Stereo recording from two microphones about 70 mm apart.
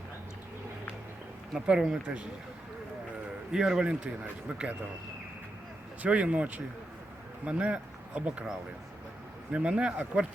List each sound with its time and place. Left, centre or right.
1.5 s speech: centre
3.5 s speech: centre
6.0 s speech: centre